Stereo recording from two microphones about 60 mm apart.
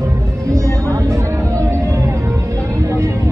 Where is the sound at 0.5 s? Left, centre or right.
Right.